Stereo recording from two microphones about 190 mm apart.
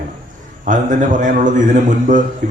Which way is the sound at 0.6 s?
40° right (ahead or behind).